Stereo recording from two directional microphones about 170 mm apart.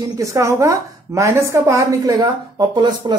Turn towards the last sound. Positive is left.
turn(degrees=-25)  # may be behind; listen again after turning